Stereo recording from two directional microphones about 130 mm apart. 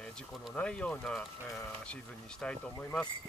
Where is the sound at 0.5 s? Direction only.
10° left (ahead or behind).